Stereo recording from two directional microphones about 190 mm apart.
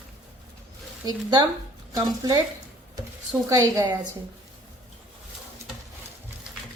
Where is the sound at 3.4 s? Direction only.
15° right (ahead or behind).